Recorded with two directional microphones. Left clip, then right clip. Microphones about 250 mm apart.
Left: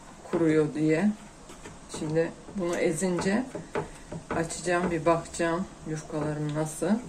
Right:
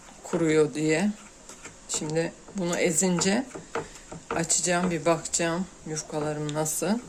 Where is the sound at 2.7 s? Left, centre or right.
Right.